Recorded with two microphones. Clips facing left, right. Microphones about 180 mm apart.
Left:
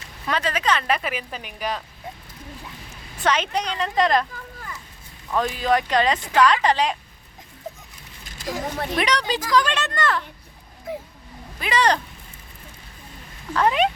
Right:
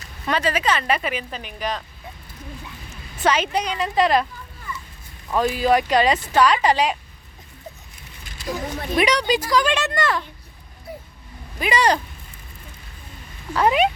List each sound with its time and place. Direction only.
0.3 s speech: 5° right (ahead or behind)
3.2 s speech: 10° right (ahead or behind)
5.3 s speech: 10° right (ahead or behind)
9.0 s speech: 10° right (ahead or behind)
10.9 s vehicle: 90° left
11.6 s speech: 10° right (ahead or behind)
13.5 s speech: 10° right (ahead or behind)